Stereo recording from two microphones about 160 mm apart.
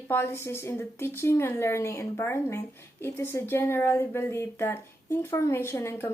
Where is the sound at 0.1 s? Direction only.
15° left (ahead or behind).